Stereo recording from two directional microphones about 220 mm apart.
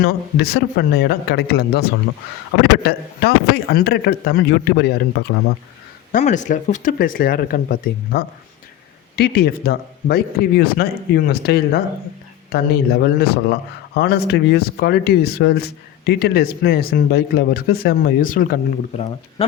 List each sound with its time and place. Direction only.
0.0 s speech: 45° left (ahead or behind)
6.1 s speech: 35° left (ahead or behind)
19.4 s speech: 25° left (ahead or behind)